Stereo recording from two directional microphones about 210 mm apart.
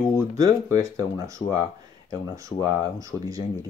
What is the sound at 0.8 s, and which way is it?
Speech, 15° right (ahead or behind).